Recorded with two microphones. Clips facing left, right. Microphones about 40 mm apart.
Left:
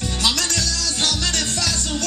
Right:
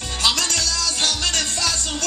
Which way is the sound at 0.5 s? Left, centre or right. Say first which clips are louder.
Right 1 dB; right.